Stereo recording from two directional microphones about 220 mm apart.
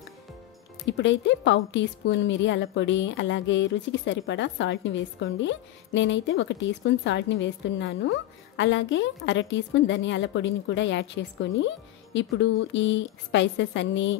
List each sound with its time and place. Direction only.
0.8 s a woman's voice: 55° left (ahead or behind)